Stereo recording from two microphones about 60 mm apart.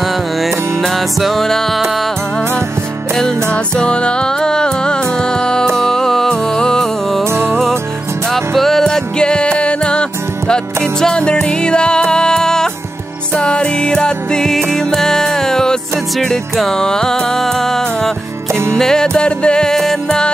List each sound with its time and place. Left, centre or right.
0.0 s music: centre
3.7 s music: centre
7.2 s music: right
8.3 s music: centre
18.5 s music: right
18.8 s music: centre